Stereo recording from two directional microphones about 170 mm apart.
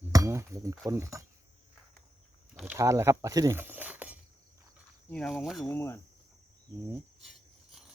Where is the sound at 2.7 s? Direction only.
15° right (ahead or behind).